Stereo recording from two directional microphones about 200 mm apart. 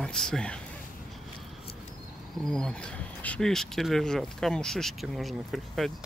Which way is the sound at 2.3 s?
Centre (ahead or behind).